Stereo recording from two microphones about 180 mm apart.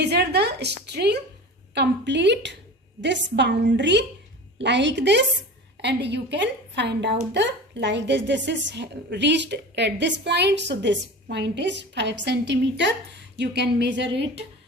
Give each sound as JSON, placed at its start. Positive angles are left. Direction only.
{"t": 0.0, "sound": "a woman's voice", "side_deg": -65}